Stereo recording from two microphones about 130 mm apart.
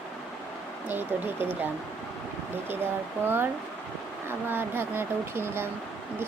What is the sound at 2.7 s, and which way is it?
Speech, 15° right (ahead or behind).